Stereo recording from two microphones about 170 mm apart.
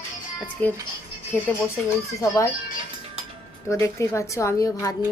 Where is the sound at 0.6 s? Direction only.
10° left (ahead or behind).